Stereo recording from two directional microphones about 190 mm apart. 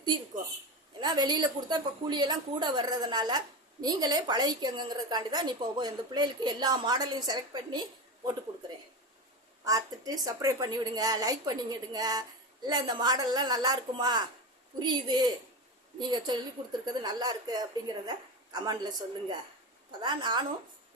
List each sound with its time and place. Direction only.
0.9 s a woman's voice: 20° right (ahead or behind)
9.6 s a woman's voice: 20° right (ahead or behind)